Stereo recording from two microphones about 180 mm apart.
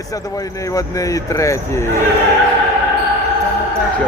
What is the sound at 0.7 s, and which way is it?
Speech, 20° left (ahead or behind).